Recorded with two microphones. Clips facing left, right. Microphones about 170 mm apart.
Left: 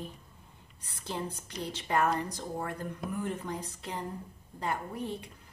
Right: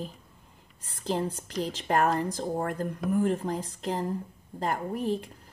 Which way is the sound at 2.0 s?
35° right (ahead or behind).